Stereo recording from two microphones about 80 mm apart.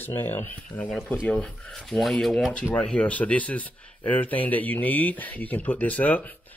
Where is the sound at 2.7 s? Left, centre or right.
Centre.